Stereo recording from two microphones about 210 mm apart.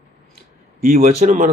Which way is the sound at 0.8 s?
40° right (ahead or behind).